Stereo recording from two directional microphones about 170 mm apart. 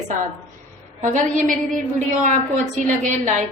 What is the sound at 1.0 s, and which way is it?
A woman's voice, 50° right (ahead or behind).